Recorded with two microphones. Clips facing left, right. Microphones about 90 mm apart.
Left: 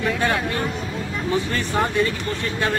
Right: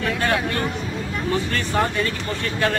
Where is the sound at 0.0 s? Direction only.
Centre (ahead or behind).